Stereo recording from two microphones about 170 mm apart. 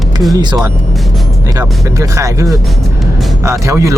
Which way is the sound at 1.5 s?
20° right (ahead or behind).